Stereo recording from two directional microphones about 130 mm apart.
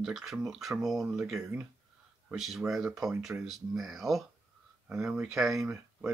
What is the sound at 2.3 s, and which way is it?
Speech, centre (ahead or behind).